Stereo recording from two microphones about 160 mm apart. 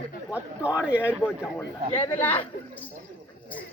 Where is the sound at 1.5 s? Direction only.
10° left (ahead or behind).